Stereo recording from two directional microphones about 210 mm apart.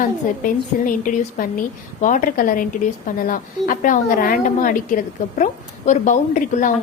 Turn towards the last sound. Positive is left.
turn(degrees=40)  # may be behind; listen again after turning